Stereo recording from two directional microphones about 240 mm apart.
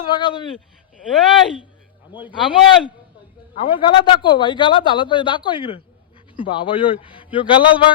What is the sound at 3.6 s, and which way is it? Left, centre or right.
A man's voice, left.